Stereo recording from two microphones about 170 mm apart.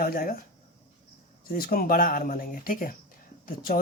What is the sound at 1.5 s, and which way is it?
Speech, 60° left (ahead or behind).